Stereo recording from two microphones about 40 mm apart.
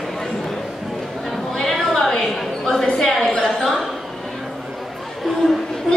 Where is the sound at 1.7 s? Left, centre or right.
Centre.